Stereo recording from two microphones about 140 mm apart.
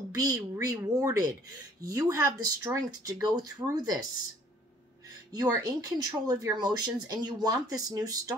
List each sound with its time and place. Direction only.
0.1 s speech: 25° right (ahead or behind)
5.3 s speech: 30° right (ahead or behind)